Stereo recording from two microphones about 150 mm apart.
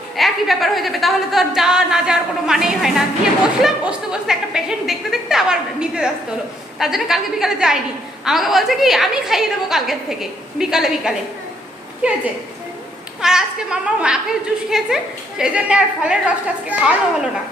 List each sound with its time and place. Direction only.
0.2 s a woman's voice: centre (ahead or behind)
13.2 s a woman's voice: 5° right (ahead or behind)